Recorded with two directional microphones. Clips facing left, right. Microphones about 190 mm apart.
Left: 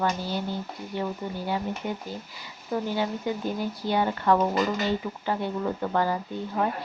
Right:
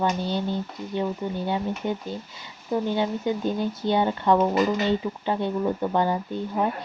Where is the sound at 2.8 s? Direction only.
20° right (ahead or behind).